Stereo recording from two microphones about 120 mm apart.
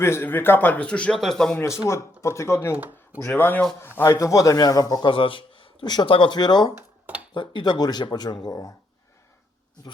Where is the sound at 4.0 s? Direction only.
25° left (ahead or behind).